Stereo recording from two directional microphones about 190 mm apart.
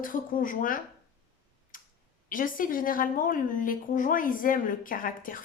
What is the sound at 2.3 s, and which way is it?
Speech, 45° left (ahead or behind).